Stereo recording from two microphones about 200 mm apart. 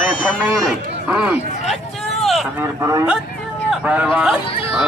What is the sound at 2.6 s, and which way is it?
Speech, 15° right (ahead or behind).